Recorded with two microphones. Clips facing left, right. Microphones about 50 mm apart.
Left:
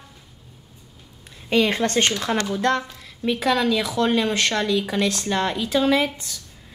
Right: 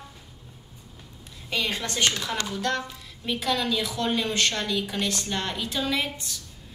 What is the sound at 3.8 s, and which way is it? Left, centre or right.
A woman's voice, left.